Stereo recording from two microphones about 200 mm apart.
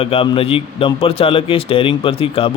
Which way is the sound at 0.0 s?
30° left (ahead or behind).